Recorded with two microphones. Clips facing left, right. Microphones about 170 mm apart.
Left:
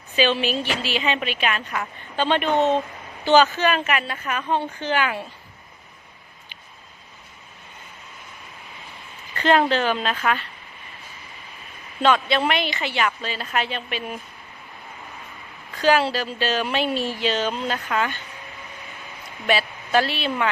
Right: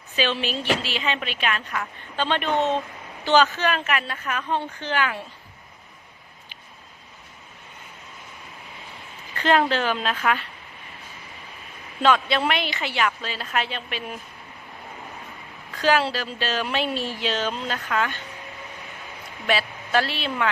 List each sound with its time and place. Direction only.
0.2 s a woman's voice: 5° left (ahead or behind)
9.3 s a woman's voice: centre (ahead or behind)
12.0 s a woman's voice: centre (ahead or behind)
15.8 s a woman's voice: centre (ahead or behind)
19.5 s a woman's voice: centre (ahead or behind)